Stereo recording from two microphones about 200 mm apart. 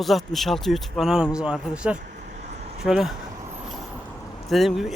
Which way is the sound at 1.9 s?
35° right (ahead or behind).